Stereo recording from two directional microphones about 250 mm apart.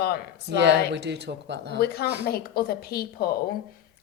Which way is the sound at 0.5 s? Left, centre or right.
Right.